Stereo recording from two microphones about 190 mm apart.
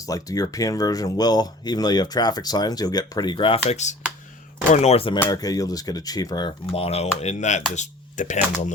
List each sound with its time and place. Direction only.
0.0 s speech: 20° left (ahead or behind)
5.2 s speech: 20° left (ahead or behind); by 8.4 s 40° left (ahead or behind)